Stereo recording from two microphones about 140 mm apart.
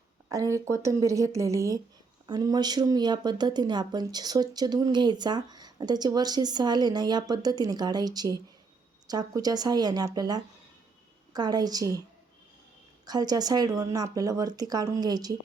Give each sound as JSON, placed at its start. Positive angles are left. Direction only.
{"t": 0.5, "sound": "speech", "side_deg": -20}
{"t": 13.1, "sound": "speech", "side_deg": -30}